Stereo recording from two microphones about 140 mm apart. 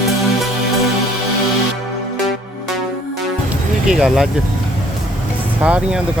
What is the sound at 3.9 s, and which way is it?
Speech, centre (ahead or behind).